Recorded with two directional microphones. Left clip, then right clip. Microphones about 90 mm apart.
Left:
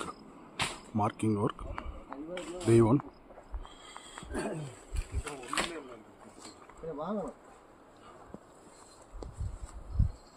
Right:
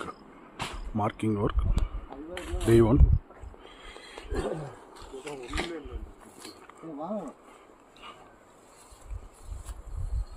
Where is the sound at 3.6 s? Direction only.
15° right (ahead or behind).